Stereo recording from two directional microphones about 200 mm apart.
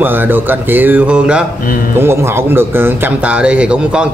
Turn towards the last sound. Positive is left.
turn(degrees=-5)  # may be behind; listen again after turning